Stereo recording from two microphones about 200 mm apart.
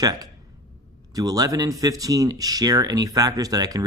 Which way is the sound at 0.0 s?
20° right (ahead or behind).